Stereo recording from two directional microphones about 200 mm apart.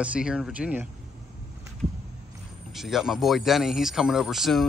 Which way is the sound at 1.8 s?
Centre (ahead or behind).